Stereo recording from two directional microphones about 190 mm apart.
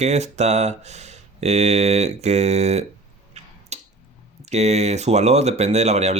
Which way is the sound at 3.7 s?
35° right (ahead or behind).